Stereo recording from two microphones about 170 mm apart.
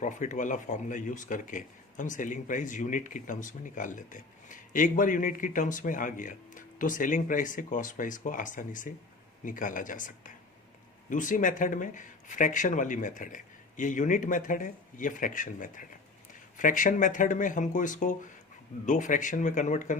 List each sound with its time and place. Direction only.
0.0 s speech: 45° left (ahead or behind)